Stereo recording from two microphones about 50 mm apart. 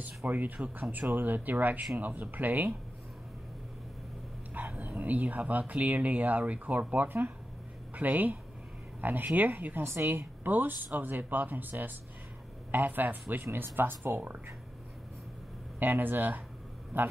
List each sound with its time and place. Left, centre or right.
0.0 s speech: right
4.7 s speech: right
7.1 s speech: right
9.8 s a woman's voice: right
10.1 s speech: right
12.7 s speech: right
15.8 s speech: right